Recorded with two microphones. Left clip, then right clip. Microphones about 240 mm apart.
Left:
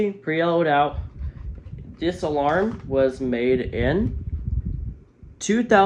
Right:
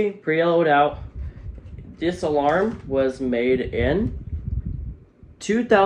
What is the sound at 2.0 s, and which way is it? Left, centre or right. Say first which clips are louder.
Speech: right 1 dB; left.